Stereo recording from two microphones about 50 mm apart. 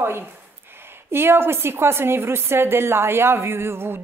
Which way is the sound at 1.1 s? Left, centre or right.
Right.